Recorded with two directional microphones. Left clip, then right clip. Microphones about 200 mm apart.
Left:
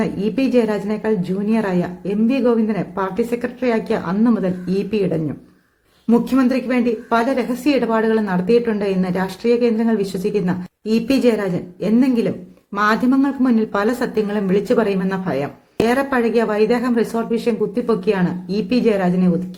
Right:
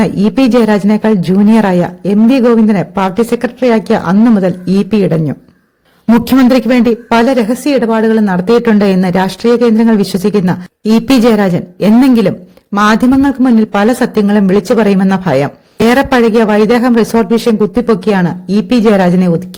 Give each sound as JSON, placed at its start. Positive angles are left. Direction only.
{"t": 0.0, "sound": "a man's voice", "side_deg": -45}
{"t": 6.2, "sound": "a woman's voice", "side_deg": -45}